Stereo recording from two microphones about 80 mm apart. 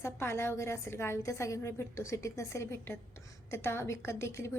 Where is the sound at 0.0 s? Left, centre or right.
Left.